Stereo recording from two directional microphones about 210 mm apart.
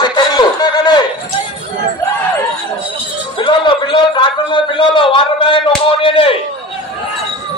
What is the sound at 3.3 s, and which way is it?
A man's voice, 25° left (ahead or behind).